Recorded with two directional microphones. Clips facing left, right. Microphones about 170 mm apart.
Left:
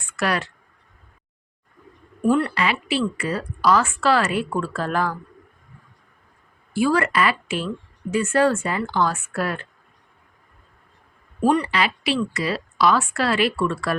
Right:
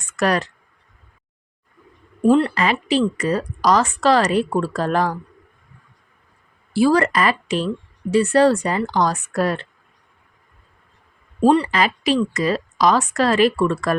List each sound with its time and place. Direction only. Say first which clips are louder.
0.0 s a sound: right 4 dB; 40° right (ahead or behind)
2.2 s speech: right 4 dB; 25° right (ahead or behind)
2.6 s a woman's voice: right 4 dB; 40° right (ahead or behind)
6.7 s a woman's voice: right 4 dB; 35° right (ahead or behind)
11.3 s speech: right 4 dB; 30° right (ahead or behind)
11.7 s a woman's voice: right 4 dB; 40° right (ahead or behind)